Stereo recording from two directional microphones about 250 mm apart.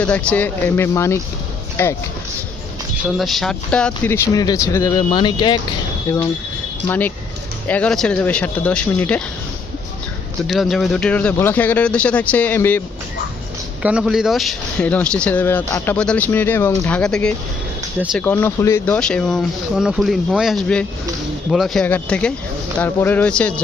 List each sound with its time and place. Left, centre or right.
0.0 s speech: centre
3.2 s a man's voice: centre
10.4 s a man's voice: centre
13.8 s a man's voice: centre